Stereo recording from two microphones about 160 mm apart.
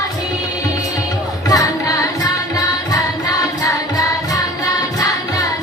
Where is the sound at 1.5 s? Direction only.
20° left (ahead or behind).